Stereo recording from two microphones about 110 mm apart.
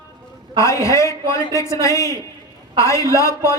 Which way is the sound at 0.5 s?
30° left (ahead or behind).